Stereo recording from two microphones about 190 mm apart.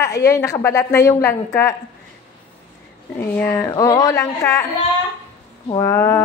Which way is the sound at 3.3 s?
15° left (ahead or behind).